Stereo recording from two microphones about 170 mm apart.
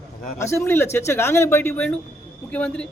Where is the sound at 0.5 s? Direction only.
15° left (ahead or behind).